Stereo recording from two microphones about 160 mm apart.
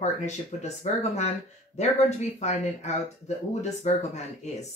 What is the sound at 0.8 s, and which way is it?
Speech, 50° left (ahead or behind).